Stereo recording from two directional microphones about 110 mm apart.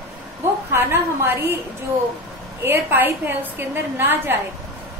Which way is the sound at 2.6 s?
20° right (ahead or behind).